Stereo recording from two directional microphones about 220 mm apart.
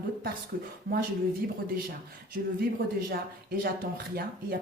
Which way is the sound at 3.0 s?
40° right (ahead or behind).